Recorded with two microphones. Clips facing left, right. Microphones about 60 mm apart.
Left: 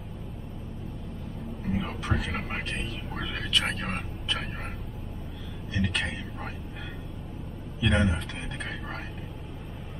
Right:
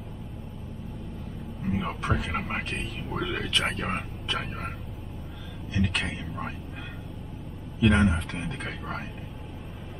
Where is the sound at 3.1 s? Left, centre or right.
Centre.